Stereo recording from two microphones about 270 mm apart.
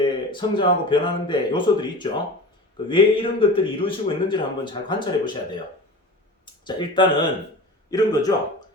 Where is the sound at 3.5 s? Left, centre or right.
Centre.